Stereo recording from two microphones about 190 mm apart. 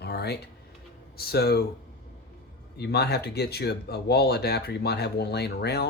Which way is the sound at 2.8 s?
60° left (ahead or behind).